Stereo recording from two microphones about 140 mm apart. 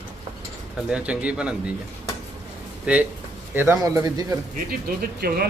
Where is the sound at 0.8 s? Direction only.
5° right (ahead or behind).